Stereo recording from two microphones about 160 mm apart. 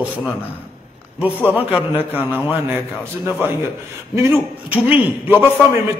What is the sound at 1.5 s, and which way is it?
A man's voice, 10° right (ahead or behind).